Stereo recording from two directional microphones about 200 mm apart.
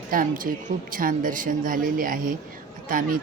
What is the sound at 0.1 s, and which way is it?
A woman's voice, 45° right (ahead or behind).